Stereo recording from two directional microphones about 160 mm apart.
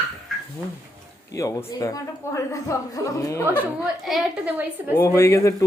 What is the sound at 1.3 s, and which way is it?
Speech, 20° left (ahead or behind).